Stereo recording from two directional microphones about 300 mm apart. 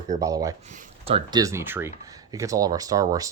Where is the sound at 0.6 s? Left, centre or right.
Right.